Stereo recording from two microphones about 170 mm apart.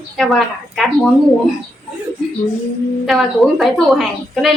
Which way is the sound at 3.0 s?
Centre (ahead or behind).